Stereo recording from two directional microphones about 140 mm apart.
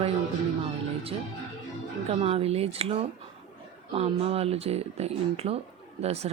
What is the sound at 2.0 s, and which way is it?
Speech, 45° right (ahead or behind).